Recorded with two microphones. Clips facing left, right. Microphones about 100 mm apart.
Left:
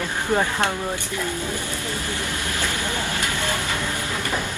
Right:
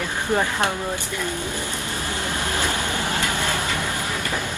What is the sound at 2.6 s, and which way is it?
Vehicle, 20° right (ahead or behind).